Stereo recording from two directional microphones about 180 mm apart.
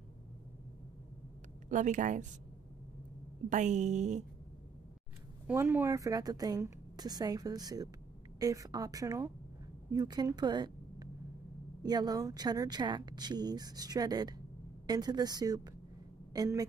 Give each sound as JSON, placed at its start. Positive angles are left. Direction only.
{"t": 1.7, "sound": "a woman's voice", "side_deg": -45}
{"t": 3.4, "sound": "a woman's voice", "side_deg": -40}
{"t": 5.5, "sound": "speech", "side_deg": -10}